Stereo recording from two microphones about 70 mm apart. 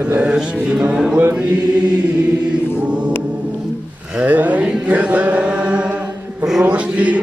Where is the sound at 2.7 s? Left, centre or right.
Centre.